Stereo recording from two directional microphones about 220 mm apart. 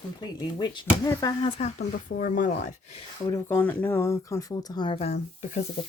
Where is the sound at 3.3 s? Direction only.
10° left (ahead or behind).